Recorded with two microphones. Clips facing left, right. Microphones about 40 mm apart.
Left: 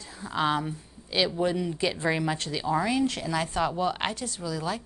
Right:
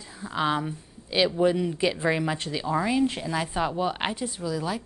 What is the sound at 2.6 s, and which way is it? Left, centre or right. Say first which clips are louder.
Speech: right 1 dB; centre.